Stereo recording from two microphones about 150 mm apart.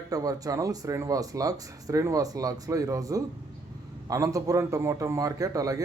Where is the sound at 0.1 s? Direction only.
25° right (ahead or behind).